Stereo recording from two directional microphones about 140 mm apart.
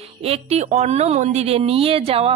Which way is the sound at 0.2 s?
50° right (ahead or behind).